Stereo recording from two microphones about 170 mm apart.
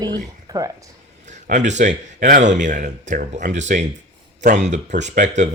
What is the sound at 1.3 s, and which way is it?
A man's voice, 45° right (ahead or behind).